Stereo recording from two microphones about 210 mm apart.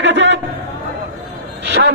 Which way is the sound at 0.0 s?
60° right (ahead or behind).